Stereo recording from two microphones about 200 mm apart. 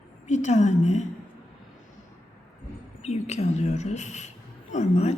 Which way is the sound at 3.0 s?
35° left (ahead or behind).